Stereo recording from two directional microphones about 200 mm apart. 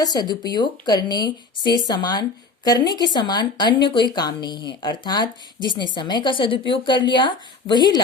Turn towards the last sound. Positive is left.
turn(degrees=20)  # may be behind; listen again after turning